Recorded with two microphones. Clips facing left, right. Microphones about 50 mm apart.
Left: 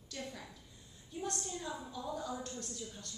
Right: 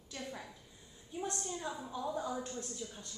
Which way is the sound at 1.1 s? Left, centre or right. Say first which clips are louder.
Right 1 dB; centre.